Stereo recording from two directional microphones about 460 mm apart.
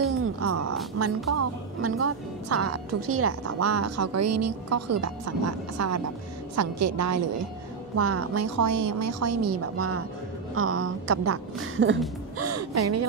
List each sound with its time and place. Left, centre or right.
0.2 s music: right
1.0 s a woman's voice: right
12.4 s gasp: right